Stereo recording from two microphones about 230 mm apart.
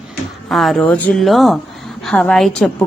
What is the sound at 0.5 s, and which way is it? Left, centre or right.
A woman's voice, centre.